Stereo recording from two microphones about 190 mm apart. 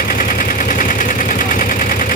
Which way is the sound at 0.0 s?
45° left (ahead or behind).